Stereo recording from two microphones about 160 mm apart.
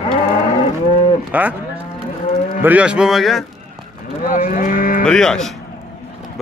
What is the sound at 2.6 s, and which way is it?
Speech, 10° right (ahead or behind).